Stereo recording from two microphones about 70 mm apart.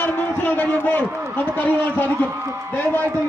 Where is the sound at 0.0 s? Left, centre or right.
Left.